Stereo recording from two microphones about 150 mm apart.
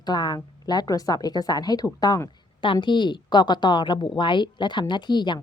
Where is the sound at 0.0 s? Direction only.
30° left (ahead or behind).